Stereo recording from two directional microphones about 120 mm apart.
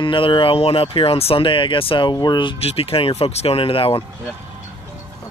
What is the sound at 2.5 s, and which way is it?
Speech, 55° left (ahead or behind).